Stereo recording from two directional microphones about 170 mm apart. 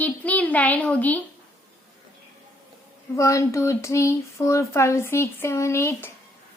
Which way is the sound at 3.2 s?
15° left (ahead or behind).